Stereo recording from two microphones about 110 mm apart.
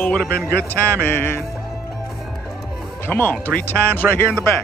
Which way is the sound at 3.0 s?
20° left (ahead or behind).